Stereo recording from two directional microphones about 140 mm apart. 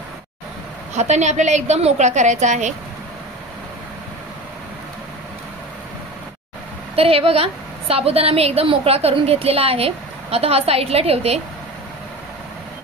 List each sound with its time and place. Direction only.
0.9 s a woman's voice: 55° right (ahead or behind)
7.0 s a woman's voice: 45° right (ahead or behind)